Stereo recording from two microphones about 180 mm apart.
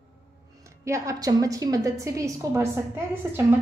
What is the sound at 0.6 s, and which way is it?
A woman's voice, 15° right (ahead or behind).